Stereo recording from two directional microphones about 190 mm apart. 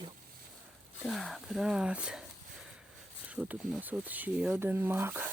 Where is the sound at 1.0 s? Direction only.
Centre (ahead or behind).